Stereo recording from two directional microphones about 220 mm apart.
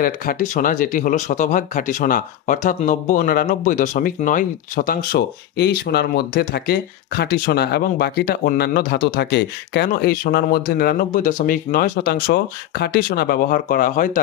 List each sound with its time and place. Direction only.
0.0 s speech: 40° left (ahead or behind)